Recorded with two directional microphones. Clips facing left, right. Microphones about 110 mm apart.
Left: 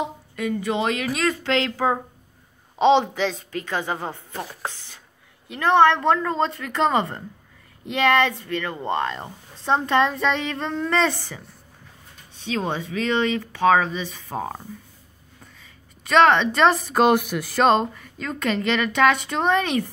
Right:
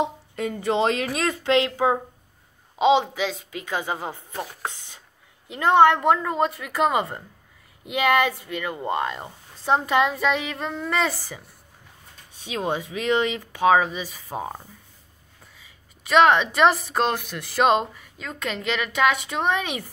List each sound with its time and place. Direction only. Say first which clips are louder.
0.0 s speech: right 1 dB; 30° right (ahead or behind)
2.8 s speech: left 2 dB; 5° right (ahead or behind)
12.4 s speech: left 1 dB; 15° right (ahead or behind)
15.6 s a woman's voice: left 2 dB; 5° right (ahead or behind); by 17.5 s 10° left (ahead or behind)
17.5 s speech: left 1 dB; 5° right (ahead or behind)